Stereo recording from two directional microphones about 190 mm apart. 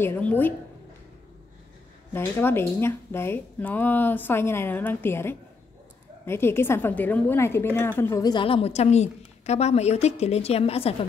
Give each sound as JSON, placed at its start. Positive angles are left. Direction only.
{"t": 0.0, "sound": "speech", "side_deg": 10}
{"t": 2.1, "sound": "a woman's voice", "side_deg": 10}